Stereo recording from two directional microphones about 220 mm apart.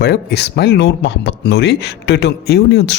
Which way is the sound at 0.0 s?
45° left (ahead or behind).